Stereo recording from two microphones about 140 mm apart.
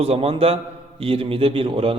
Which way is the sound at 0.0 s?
45° right (ahead or behind).